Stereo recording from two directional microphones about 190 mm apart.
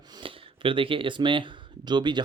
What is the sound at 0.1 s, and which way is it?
Speech, 25° right (ahead or behind).